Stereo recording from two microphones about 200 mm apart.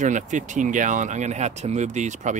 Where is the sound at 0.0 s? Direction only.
40° right (ahead or behind).